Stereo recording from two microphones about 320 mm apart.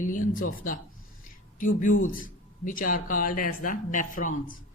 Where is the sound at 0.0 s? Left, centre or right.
Left.